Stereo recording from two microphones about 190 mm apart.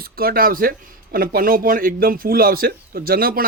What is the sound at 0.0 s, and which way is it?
A man's voice, 50° right (ahead or behind).